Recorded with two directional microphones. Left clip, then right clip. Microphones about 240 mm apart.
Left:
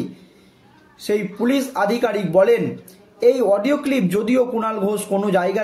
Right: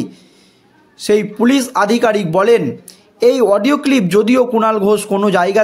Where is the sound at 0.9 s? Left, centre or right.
Right.